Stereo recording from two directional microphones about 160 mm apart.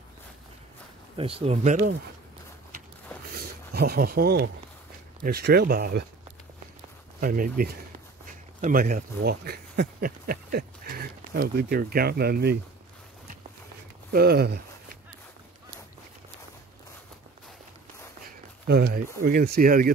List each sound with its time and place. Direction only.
1.1 s speech: 35° right (ahead or behind)
3.7 s speech: 75° right (ahead or behind)
7.2 s speech: 60° right (ahead or behind); by 12.5 s 80° right
14.1 s speech: 80° right
19.1 s speech: 65° right (ahead or behind)